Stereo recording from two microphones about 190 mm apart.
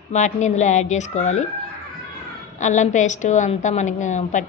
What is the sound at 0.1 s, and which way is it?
A woman's voice, 40° left (ahead or behind).